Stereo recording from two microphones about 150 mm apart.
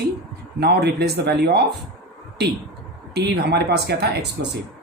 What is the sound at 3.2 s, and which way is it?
Speech, 90° right.